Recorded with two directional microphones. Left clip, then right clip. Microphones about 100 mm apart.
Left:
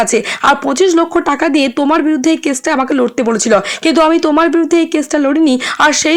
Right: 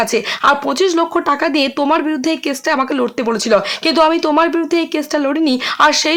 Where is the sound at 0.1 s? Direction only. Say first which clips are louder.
Left 2 dB; 30° left (ahead or behind).